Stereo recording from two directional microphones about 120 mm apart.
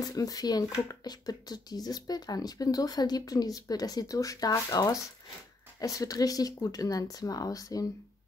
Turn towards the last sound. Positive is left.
turn(degrees=30)  # may be behind; listen again after turning